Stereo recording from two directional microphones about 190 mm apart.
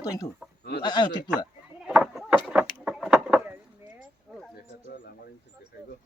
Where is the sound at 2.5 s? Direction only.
5° right (ahead or behind).